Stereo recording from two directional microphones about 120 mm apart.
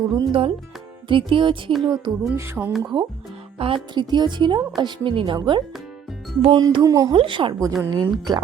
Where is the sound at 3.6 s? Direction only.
50° right (ahead or behind).